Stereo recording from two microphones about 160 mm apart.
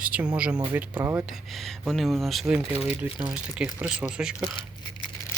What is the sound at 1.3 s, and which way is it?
Speech, centre (ahead or behind).